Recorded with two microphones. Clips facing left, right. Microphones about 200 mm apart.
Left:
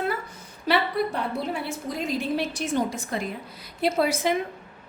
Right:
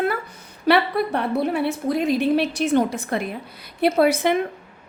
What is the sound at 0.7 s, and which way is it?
A woman's voice, 65° right (ahead or behind).